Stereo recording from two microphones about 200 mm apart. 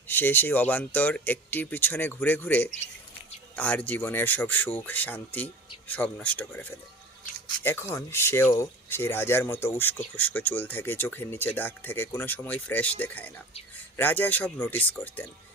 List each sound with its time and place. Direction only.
0.1 s speech: 10° left (ahead or behind)